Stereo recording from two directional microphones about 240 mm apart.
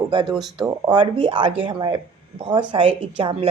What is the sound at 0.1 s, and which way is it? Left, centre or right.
A woman's voice, centre.